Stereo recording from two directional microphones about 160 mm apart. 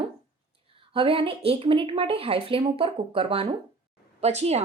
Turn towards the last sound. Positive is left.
turn(degrees=-40)  # may be behind; listen again after turning